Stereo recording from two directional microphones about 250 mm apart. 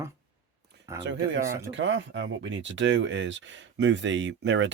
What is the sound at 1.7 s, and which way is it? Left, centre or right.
Speech, right.